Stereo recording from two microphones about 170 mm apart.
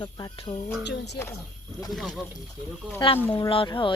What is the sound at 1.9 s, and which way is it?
Speech, centre (ahead or behind).